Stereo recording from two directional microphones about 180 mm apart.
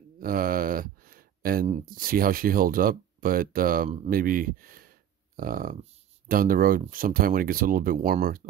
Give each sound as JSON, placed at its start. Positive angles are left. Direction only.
{"t": 0.2, "sound": "speech", "side_deg": -50}